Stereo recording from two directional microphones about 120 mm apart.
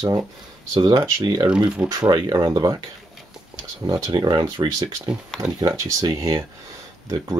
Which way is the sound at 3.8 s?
40° right (ahead or behind).